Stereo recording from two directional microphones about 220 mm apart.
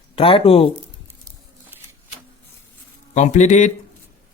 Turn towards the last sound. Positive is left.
turn(degrees=35)  # may be behind; listen again after turning